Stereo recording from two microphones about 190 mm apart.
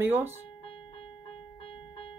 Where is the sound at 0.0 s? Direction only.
10° right (ahead or behind).